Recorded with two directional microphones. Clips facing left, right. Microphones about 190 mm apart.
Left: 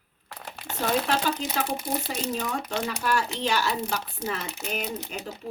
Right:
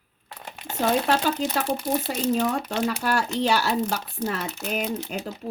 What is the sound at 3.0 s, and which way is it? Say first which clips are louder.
Speech: right 1 dB; 45° right (ahead or behind).